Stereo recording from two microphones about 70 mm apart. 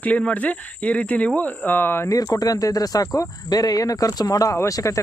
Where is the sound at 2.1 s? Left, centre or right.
Left.